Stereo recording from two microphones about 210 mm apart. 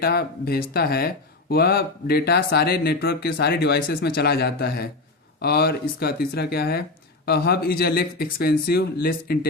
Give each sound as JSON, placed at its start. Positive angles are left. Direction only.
{"t": 0.0, "sound": "speech", "side_deg": 45}